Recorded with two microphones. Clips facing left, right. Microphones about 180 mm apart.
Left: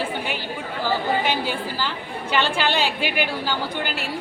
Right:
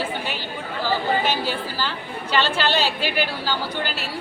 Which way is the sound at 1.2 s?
15° left (ahead or behind).